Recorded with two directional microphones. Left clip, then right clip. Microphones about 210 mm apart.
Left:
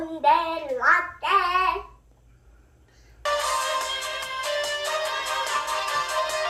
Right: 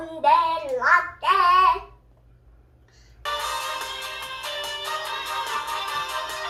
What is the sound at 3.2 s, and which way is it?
Music, 15° left (ahead or behind).